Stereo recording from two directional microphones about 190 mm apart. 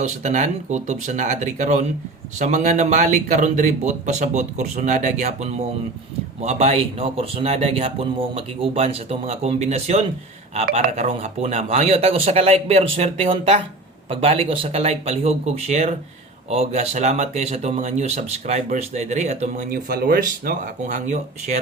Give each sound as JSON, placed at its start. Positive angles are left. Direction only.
{"t": 0.0, "sound": "a man's voice", "side_deg": -40}
{"t": 19.7, "sound": "speech", "side_deg": -55}